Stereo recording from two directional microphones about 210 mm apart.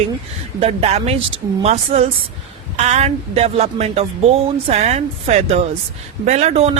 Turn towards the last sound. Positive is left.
turn(degrees=-30)  # may be behind; listen again after turning